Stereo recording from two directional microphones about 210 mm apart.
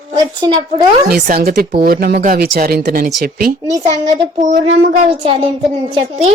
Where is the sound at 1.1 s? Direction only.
45° right (ahead or behind).